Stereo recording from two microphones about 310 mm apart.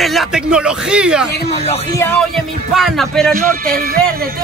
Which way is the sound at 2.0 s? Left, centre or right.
Centre.